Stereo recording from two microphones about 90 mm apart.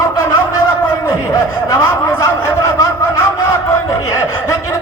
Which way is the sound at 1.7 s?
35° left (ahead or behind).